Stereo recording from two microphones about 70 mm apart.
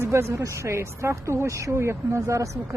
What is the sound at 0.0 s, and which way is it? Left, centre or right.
Speech, right.